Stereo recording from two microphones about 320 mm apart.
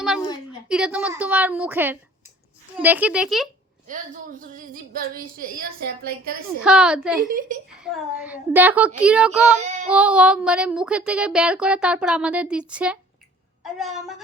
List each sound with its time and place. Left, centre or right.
0.7 s speech: centre
3.8 s speech: right
6.6 s speech: centre
7.3 s speech: right
7.7 s speech: centre